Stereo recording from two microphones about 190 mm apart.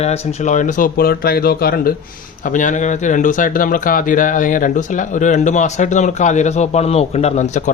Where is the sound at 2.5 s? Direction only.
40° left (ahead or behind).